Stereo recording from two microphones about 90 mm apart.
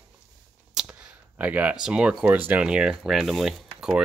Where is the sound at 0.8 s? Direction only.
5° right (ahead or behind).